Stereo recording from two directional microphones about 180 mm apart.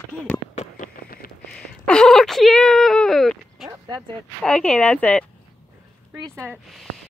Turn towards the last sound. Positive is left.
turn(degrees=0)  # may be behind; listen again after turning